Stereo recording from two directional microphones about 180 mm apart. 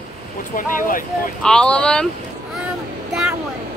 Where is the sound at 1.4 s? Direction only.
5° left (ahead or behind).